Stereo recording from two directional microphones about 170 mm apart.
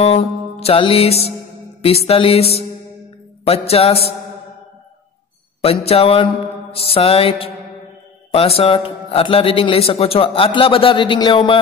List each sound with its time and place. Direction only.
0.0 s a man's voice: 35° left (ahead or behind)
5.6 s a man's voice: 35° left (ahead or behind)